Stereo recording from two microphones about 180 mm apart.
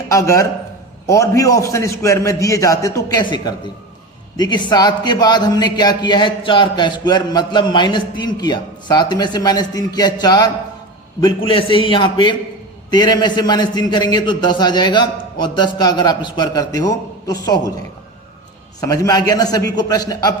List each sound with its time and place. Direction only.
0.1 s a man's voice: 15° left (ahead or behind)
18.8 s a man's voice: 20° left (ahead or behind)